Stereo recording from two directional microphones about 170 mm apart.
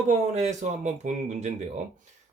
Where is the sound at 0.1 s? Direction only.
45° right (ahead or behind).